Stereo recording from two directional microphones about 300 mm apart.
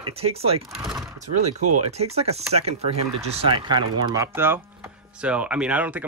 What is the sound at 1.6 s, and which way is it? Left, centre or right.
Speech, right.